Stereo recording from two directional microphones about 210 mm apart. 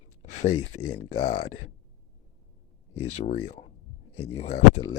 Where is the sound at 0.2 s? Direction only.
30° left (ahead or behind).